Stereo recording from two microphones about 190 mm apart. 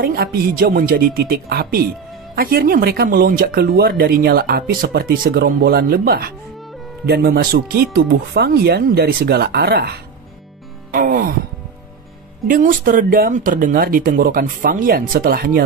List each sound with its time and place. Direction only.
0.0 s speech: 50° right (ahead or behind)
12.4 s speech: 45° right (ahead or behind)